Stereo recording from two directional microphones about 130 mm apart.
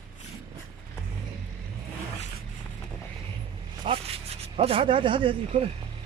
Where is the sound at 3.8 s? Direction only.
45° right (ahead or behind).